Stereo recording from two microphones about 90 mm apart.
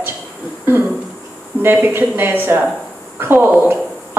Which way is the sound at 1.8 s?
25° right (ahead or behind).